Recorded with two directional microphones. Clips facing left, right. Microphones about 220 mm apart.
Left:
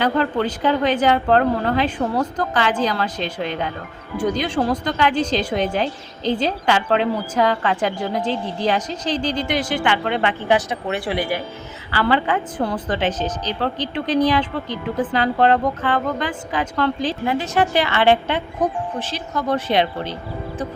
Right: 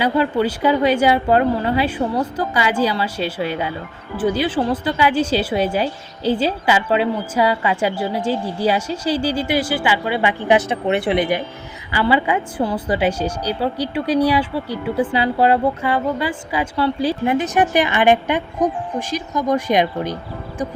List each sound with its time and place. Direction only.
0.0 s a woman's voice: 10° right (ahead or behind)
10.7 s a woman's voice: 25° right (ahead or behind)